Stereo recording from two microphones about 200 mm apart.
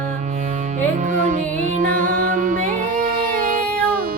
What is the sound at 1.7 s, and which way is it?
Music, 45° right (ahead or behind).